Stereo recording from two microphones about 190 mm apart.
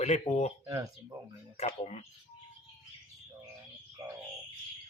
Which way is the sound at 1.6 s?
35° left (ahead or behind).